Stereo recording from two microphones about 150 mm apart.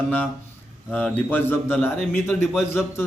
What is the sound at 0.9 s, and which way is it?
A man's voice, 10° left (ahead or behind).